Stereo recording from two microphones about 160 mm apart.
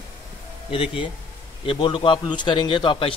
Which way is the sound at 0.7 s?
35° left (ahead or behind).